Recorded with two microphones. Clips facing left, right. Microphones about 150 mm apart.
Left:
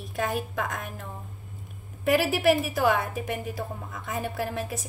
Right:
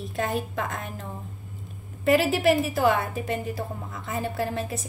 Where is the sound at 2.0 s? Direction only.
10° left (ahead or behind).